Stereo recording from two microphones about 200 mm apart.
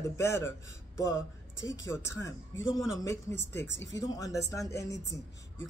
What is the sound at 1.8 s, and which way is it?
Speech, 15° left (ahead or behind).